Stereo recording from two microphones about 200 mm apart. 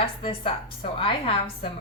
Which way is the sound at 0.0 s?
25° left (ahead or behind).